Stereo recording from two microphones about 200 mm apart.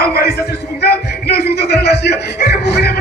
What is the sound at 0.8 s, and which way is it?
Music, 55° left (ahead or behind).